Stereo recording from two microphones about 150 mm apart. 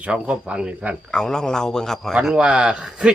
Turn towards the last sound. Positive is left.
turn(degrees=-5)  # may be behind; listen again after turning